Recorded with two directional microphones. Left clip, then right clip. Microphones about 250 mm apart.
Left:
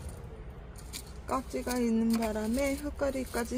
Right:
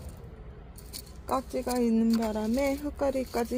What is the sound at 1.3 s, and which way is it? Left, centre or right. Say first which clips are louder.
Speech: right 3 dB; centre.